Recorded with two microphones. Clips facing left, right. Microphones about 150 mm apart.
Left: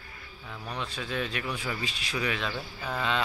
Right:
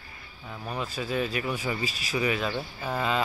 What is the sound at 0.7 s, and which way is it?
Speech, 5° right (ahead or behind).